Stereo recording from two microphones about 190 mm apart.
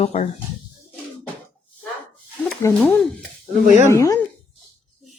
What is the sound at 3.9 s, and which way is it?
Speech, 15° left (ahead or behind).